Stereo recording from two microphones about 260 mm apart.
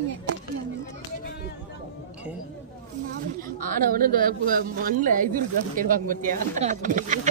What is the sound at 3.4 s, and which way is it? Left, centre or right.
Speech, right.